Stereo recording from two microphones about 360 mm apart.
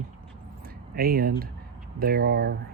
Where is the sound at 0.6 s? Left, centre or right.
Right.